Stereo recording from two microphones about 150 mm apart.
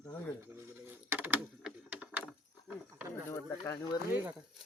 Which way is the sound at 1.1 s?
15° right (ahead or behind).